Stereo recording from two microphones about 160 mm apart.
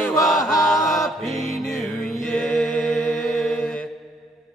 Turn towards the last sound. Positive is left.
turn(degrees=5)  # may be behind; listen again after turning